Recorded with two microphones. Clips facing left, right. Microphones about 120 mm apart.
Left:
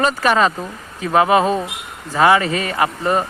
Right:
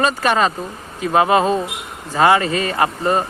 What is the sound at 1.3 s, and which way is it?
Speech, 15° left (ahead or behind).